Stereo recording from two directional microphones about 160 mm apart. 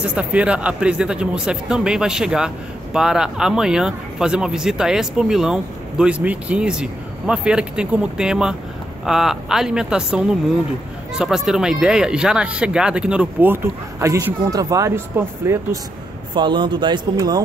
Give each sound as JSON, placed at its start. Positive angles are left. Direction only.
{"t": 0.0, "sound": "speech", "side_deg": -5}
{"t": 16.3, "sound": "speech", "side_deg": -30}